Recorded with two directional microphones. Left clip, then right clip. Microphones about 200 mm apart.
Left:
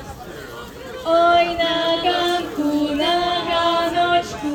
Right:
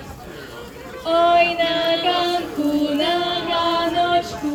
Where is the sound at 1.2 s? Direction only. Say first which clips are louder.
Even; 45° right (ahead or behind).